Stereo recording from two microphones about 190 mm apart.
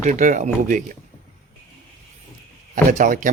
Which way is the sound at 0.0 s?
40° right (ahead or behind).